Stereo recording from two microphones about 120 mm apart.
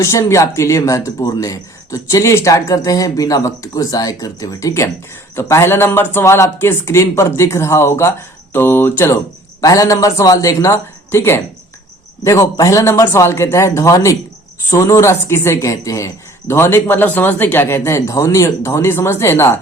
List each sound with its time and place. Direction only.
0.0 s speech: 25° left (ahead or behind)
9.6 s speech: 30° left (ahead or behind)